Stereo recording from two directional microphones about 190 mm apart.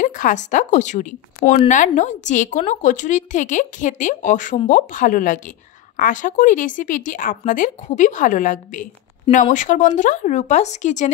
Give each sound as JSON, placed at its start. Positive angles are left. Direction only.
{"t": 0.0, "sound": "a woman's voice", "side_deg": 40}